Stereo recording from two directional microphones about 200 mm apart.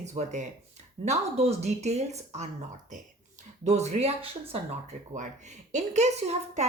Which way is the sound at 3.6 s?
35° right (ahead or behind).